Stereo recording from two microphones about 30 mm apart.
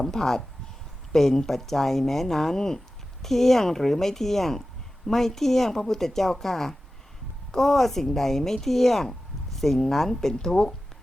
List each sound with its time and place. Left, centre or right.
0.0 s speech: centre